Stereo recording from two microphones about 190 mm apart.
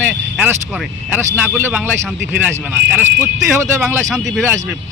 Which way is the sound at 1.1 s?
10° right (ahead or behind).